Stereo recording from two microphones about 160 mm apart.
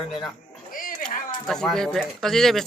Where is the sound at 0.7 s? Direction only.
60° left (ahead or behind).